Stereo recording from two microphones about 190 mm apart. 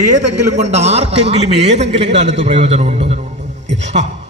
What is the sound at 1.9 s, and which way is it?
Speech, 65° right (ahead or behind).